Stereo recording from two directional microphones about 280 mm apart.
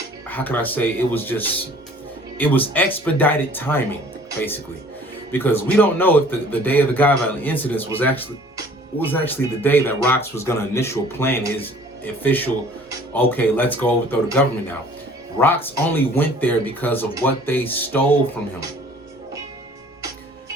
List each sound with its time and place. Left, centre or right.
0.3 s a man's voice: centre
15.4 s a man's voice: centre